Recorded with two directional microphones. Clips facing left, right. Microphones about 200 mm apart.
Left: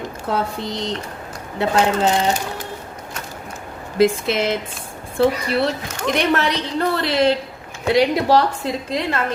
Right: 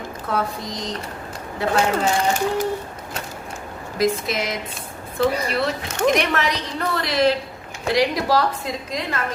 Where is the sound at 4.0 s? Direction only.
30° left (ahead or behind).